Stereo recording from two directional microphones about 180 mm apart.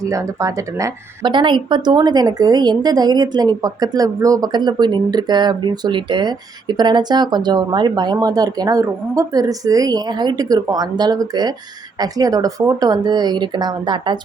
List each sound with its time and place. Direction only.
0.0 s a woman's voice: 15° right (ahead or behind)